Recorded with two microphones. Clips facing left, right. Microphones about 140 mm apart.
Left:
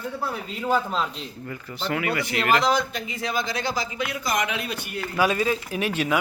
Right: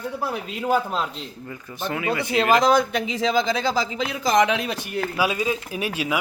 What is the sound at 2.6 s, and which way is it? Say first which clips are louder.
Speech: right 5 dB; 50° right (ahead or behind).